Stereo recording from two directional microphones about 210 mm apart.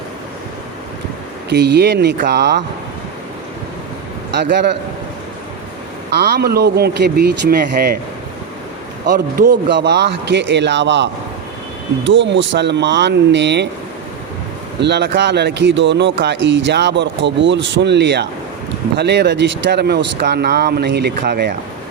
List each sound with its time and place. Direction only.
1.5 s speech: 55° right (ahead or behind)
4.4 s speech: 55° right (ahead or behind)
6.1 s speech: 50° right (ahead or behind)
9.0 s speech: 45° right (ahead or behind)
14.8 s speech: 55° right (ahead or behind)